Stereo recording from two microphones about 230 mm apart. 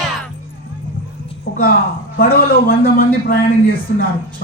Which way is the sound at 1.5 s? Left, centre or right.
Left.